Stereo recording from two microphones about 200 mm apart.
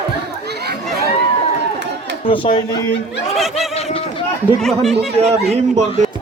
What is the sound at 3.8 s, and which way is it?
Run, 30° left (ahead or behind).